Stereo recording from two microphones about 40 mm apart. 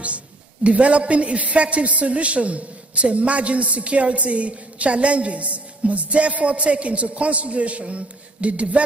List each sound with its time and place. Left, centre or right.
0.7 s a woman's voice: right